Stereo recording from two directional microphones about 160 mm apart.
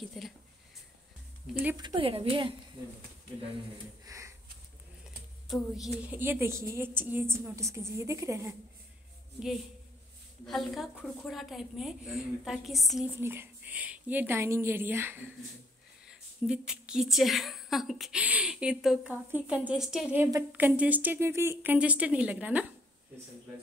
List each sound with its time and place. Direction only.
0.0 s a woman's voice: centre (ahead or behind)
1.5 s a woman's voice: 10° right (ahead or behind)
1.8 s a woman's voice: 30° right (ahead or behind)
4.0 s a sound: 20° right (ahead or behind)
6.0 s a woman's voice: 10° right (ahead or behind)
10.4 s a woman's voice: centre (ahead or behind)
13.2 s a woman's voice: 15° right (ahead or behind)